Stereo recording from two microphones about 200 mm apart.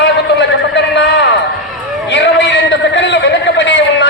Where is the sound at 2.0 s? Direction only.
60° left (ahead or behind).